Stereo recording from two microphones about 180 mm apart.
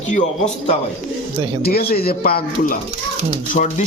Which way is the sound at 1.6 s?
60° left (ahead or behind).